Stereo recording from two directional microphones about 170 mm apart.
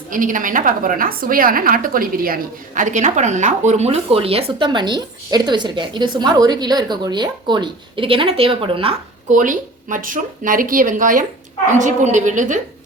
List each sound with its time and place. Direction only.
0.1 s a woman's voice: 50° right (ahead or behind); by 9.0 s 30° right (ahead or behind)
9.3 s speech: 50° right (ahead or behind)